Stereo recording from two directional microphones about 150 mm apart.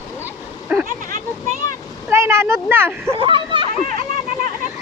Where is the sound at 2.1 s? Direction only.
15° right (ahead or behind).